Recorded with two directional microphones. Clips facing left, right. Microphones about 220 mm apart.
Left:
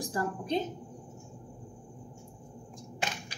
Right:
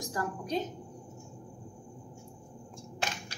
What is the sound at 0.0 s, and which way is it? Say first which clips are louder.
Speech: left 2 dB; 30° left (ahead or behind).